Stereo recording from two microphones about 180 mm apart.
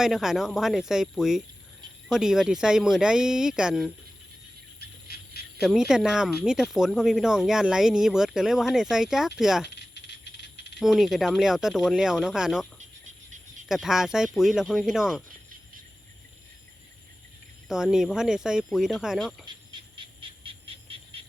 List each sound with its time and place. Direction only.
0.0 s speech: centre (ahead or behind)
5.0 s a sound: 60° left (ahead or behind)
5.5 s speech: centre (ahead or behind)
9.7 s rattle: 75° left (ahead or behind)
10.8 s speech: centre (ahead or behind)
13.1 s a sound: 45° right (ahead or behind)
13.7 s speech: centre (ahead or behind)
17.7 s speech: 5° right (ahead or behind)
19.5 s frog: 25° right (ahead or behind)